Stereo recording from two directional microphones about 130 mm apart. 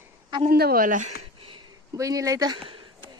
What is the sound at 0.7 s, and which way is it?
Speech, 85° right.